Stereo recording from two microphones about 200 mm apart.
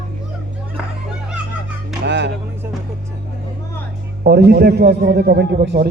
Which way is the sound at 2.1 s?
60° right (ahead or behind).